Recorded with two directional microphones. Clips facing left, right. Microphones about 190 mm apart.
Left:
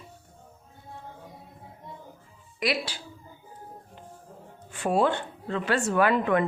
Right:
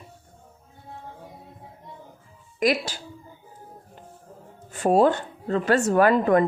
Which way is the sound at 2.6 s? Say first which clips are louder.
Right 6 dB; 45° right (ahead or behind).